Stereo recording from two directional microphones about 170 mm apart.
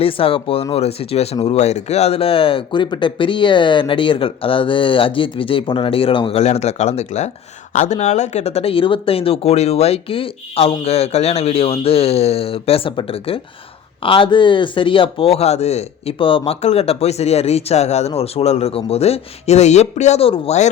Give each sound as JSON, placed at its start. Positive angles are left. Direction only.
{"t": 0.0, "sound": "speech", "side_deg": 35}